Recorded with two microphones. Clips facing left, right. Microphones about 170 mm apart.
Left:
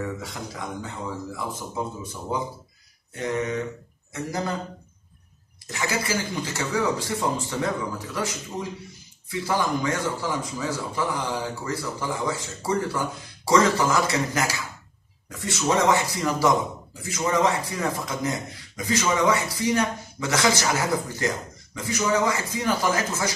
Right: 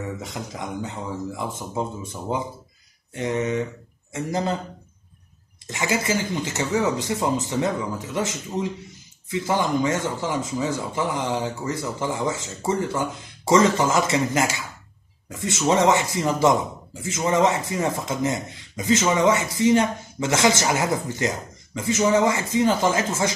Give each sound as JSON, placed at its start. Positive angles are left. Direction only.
{"t": 0.2, "sound": "speech", "side_deg": -20}
{"t": 5.7, "sound": "speech", "side_deg": -20}